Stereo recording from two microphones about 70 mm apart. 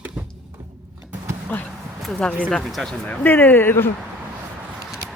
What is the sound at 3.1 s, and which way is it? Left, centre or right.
Speech, left.